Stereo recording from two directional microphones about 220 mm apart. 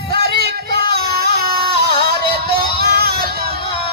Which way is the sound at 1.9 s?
20° left (ahead or behind).